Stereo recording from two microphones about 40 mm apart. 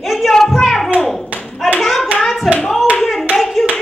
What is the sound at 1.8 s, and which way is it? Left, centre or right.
Hands, centre.